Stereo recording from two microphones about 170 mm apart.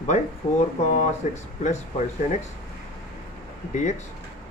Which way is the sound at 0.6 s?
45° left (ahead or behind).